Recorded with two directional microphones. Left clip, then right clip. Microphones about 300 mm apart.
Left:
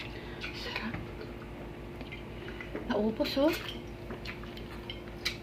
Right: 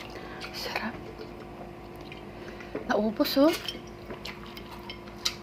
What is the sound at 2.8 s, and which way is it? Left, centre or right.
Speech, right.